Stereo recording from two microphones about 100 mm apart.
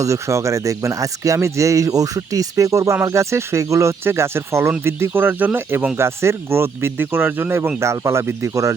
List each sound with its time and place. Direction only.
0.0 s speech: 30° right (ahead or behind)